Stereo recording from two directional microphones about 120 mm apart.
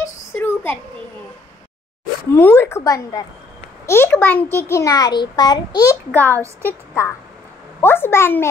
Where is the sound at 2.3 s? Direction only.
20° left (ahead or behind).